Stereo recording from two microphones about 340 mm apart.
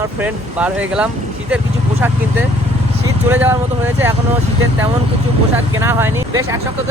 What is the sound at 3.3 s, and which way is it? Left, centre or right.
Speech, centre.